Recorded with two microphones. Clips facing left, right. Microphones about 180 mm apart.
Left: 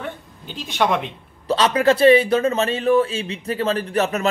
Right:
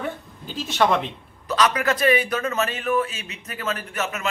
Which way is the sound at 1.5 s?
30° left (ahead or behind).